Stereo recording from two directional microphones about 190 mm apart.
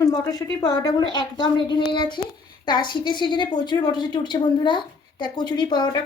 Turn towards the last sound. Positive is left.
turn(degrees=20)  # may be behind; listen again after turning